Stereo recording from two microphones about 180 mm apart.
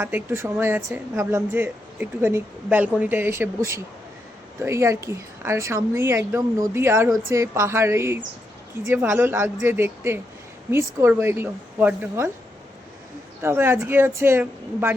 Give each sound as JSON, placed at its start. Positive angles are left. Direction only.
{"t": 0.0, "sound": "a woman's voice", "side_deg": -15}
{"t": 13.4, "sound": "a woman's voice", "side_deg": -15}